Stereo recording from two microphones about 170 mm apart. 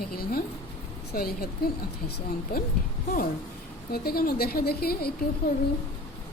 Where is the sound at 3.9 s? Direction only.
65° left (ahead or behind).